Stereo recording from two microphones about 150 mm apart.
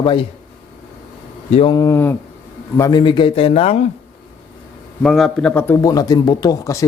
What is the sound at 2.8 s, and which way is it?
Speech, 30° left (ahead or behind).